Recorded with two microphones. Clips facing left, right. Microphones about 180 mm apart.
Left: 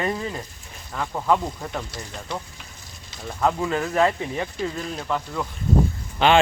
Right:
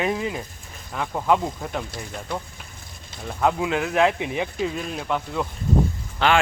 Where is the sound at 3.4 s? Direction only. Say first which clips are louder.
Right 1 dB; 10° right (ahead or behind).